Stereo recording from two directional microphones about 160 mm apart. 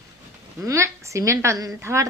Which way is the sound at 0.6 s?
20° right (ahead or behind).